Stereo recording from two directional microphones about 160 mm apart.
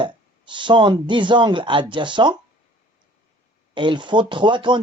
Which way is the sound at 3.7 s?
30° right (ahead or behind).